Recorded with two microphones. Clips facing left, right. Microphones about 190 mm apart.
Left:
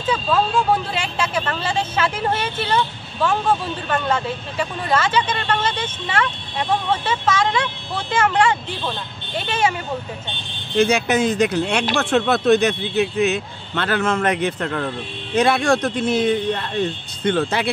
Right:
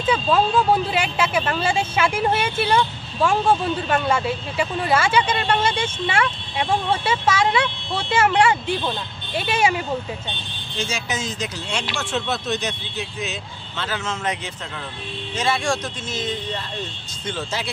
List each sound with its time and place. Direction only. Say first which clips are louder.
1.0 s speech: right 1 dB; 15° right (ahead or behind)
10.8 s speech: left 11 dB; 60° left (ahead or behind)